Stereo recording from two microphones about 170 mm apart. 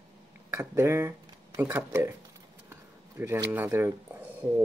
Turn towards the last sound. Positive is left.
turn(degrees=-15)  # may be behind; listen again after turning